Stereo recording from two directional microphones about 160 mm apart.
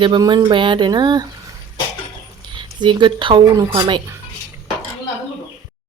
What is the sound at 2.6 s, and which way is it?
Speech, 30° right (ahead or behind).